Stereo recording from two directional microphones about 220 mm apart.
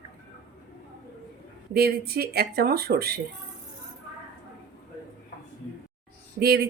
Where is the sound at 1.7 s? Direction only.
45° right (ahead or behind).